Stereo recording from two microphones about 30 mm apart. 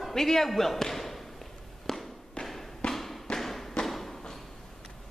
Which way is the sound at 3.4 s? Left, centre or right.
Centre.